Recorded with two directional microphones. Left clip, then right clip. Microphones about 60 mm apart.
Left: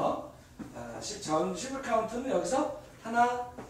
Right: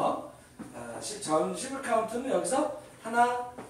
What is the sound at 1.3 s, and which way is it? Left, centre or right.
Speech, centre.